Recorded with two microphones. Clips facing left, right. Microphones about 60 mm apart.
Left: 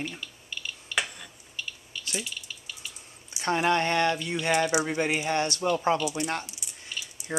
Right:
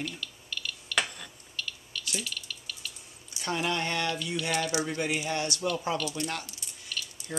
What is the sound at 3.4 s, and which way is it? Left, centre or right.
Speech, left.